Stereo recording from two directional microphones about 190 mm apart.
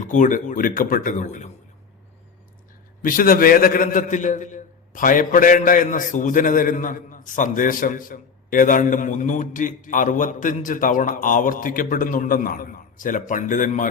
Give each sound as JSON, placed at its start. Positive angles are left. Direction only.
{"t": 0.0, "sound": "a man's voice", "side_deg": 40}
{"t": 3.0, "sound": "a man's voice", "side_deg": 50}